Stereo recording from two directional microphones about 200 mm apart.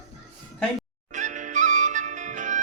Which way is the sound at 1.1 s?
40° right (ahead or behind).